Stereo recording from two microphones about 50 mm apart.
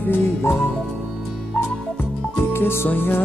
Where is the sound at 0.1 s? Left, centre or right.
Left.